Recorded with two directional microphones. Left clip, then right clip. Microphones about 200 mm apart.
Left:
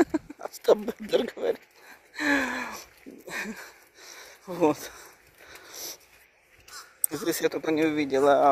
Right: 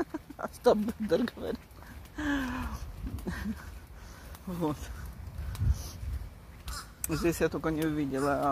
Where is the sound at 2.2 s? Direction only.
20° left (ahead or behind).